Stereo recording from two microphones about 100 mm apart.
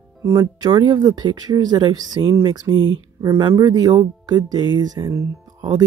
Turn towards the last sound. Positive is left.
turn(degrees=-40)  # may be behind; listen again after turning